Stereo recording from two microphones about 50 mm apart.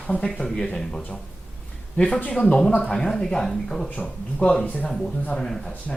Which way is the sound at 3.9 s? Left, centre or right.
Left.